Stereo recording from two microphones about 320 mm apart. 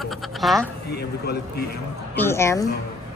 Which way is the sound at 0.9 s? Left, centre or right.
Left.